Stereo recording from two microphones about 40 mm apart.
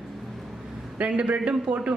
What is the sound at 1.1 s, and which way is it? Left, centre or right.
Speech, right.